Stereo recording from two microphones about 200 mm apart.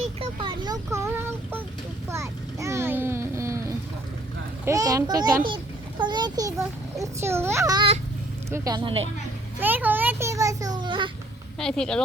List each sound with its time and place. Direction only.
0.0 s child singing: 25° right (ahead or behind)
2.0 s a sound: 15° right (ahead or behind)
4.6 s a child's voice: 15° right (ahead or behind)
9.6 s a child's voice: 10° right (ahead or behind)
11.6 s speech: 5° left (ahead or behind)